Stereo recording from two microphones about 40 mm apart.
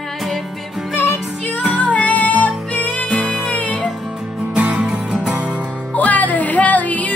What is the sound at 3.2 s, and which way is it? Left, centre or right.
Music, left.